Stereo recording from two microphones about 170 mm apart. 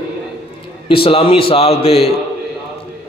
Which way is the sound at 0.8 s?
30° left (ahead or behind).